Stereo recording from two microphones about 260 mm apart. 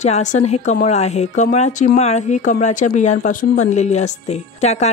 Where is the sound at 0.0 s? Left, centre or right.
Left.